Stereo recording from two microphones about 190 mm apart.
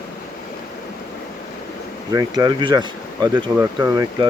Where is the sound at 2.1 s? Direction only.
20° right (ahead or behind).